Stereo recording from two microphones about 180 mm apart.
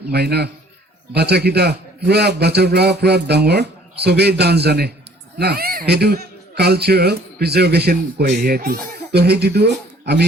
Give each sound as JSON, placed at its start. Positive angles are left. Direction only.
{"t": 0.1, "sound": "a man's voice", "side_deg": -65}